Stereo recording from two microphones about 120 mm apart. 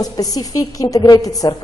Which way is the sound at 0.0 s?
30° left (ahead or behind).